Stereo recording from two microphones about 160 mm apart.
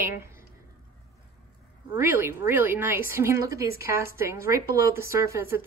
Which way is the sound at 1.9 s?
10° right (ahead or behind).